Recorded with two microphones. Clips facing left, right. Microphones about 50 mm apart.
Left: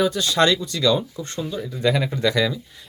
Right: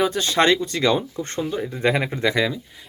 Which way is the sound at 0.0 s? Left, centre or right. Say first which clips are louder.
Even; right.